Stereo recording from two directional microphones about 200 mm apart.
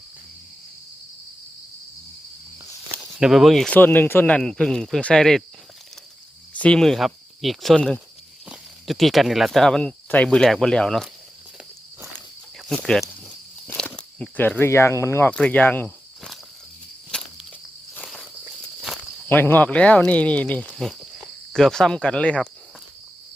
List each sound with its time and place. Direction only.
3.0 s speech: centre (ahead or behind)
6.6 s speech: 5° left (ahead or behind)
12.6 s speech: centre (ahead or behind)
17.1 s cricket: 5° left (ahead or behind)
17.9 s insect: centre (ahead or behind)
18.8 s speech: 5° left (ahead or behind)